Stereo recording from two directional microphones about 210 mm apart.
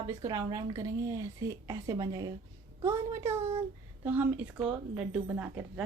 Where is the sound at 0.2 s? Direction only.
20° right (ahead or behind).